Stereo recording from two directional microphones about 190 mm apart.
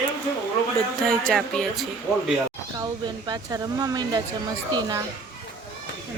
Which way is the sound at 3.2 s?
20° right (ahead or behind).